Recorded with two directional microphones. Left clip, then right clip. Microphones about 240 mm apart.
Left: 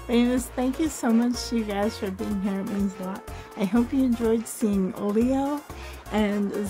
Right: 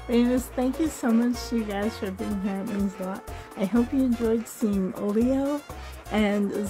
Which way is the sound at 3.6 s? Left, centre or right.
Centre.